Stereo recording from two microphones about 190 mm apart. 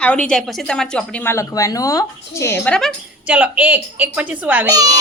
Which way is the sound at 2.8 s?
Centre (ahead or behind).